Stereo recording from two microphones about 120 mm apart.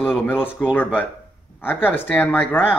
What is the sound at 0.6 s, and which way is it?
Speech, centre (ahead or behind).